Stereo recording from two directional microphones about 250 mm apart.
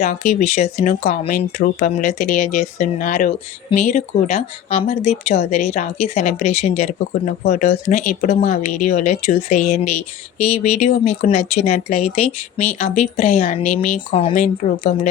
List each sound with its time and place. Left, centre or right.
0.0 s speech: left